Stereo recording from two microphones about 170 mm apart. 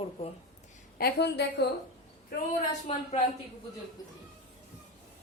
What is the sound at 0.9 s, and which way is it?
Speech, 70° left (ahead or behind).